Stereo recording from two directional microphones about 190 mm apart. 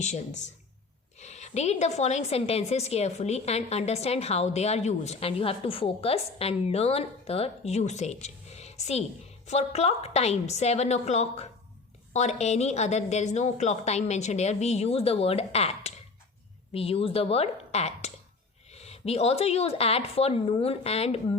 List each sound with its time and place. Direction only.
0.0 s a woman's voice: 40° left (ahead or behind)